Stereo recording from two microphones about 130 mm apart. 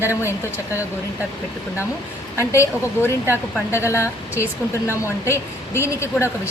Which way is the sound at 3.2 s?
15° right (ahead or behind).